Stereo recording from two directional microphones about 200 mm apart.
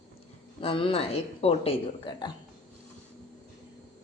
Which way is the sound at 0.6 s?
25° left (ahead or behind).